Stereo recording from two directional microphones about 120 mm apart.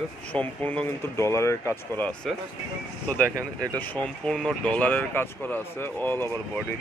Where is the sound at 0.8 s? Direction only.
25° left (ahead or behind).